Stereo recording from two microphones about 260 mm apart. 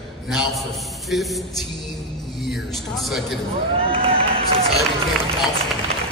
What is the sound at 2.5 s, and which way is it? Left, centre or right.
Speech, centre.